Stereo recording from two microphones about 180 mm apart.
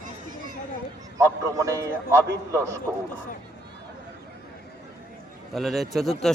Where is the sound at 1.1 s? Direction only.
15° right (ahead or behind).